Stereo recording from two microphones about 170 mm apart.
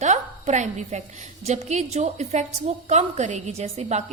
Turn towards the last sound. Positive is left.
turn(degrees=-40)  # may be behind; listen again after turning